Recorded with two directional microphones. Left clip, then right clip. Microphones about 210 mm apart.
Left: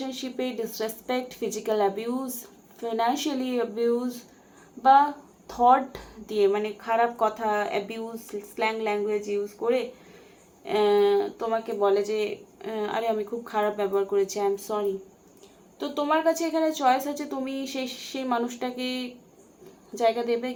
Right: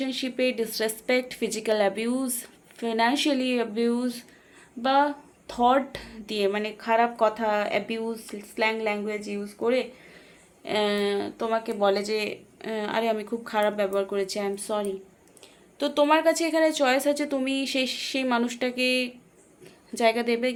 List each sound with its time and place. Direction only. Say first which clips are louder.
0.0 s speech: right 5 dB; 45° right (ahead or behind)